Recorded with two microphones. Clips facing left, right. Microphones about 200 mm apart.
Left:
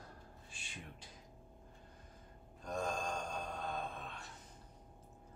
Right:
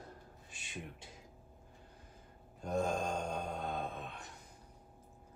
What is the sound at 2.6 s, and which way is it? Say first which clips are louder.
Gasp: right 5 dB; 25° right (ahead or behind).